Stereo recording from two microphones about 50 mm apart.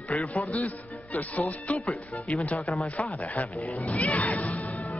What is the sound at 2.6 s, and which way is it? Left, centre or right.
Speech, centre.